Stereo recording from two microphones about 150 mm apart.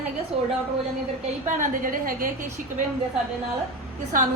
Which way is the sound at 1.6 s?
65° right (ahead or behind).